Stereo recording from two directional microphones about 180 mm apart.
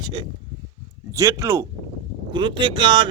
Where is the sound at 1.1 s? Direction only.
15° right (ahead or behind).